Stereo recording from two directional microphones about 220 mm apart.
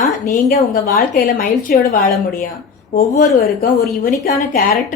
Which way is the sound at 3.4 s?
45° left (ahead or behind).